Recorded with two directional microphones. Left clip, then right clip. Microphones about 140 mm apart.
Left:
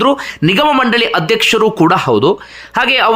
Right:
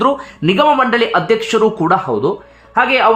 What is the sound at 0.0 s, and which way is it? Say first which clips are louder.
Speech: left 2 dB; 25° left (ahead or behind).